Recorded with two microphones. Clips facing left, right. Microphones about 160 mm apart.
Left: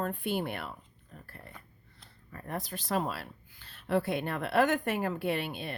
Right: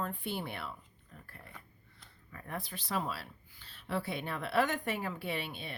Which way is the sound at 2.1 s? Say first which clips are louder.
Left 4 dB; 40° left (ahead or behind).